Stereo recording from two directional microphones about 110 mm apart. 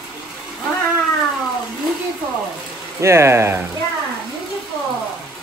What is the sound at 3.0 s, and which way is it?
Speech, 25° right (ahead or behind).